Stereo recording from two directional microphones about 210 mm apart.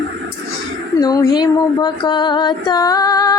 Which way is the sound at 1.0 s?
20° left (ahead or behind).